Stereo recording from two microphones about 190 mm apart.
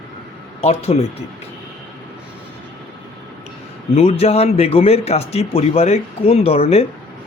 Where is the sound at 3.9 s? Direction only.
30° left (ahead or behind).